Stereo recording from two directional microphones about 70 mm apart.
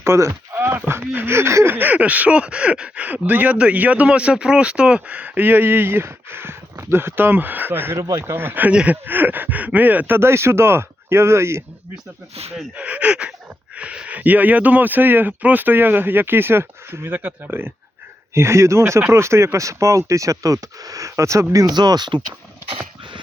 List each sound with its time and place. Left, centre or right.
0.0 s speech: right
7.9 s speech: right
8.2 s speech: right
8.7 s speech: centre
9.0 s speech: right
10.2 s speech: right
12.7 s speech: centre
18.3 s speech: right
21.7 s speech: right